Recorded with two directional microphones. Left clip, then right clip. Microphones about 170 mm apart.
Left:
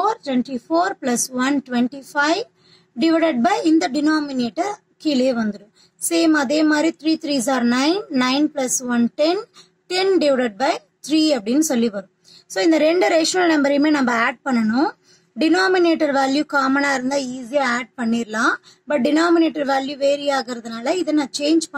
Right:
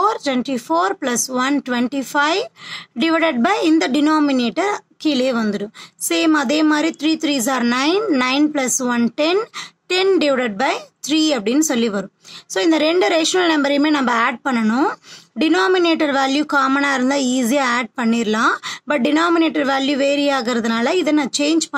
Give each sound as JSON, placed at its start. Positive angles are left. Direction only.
{"t": 0.0, "sound": "speech", "side_deg": -40}